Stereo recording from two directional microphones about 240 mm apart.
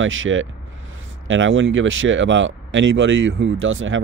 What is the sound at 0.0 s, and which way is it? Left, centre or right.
Speech, right.